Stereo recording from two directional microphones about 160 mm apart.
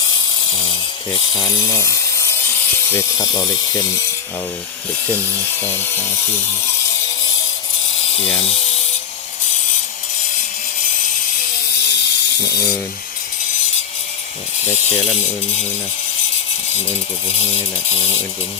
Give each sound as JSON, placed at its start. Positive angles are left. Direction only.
{"t": 1.4, "sound": "speech", "side_deg": 20}
{"t": 8.1, "sound": "speech", "side_deg": 35}
{"t": 11.9, "sound": "ratchet", "side_deg": 90}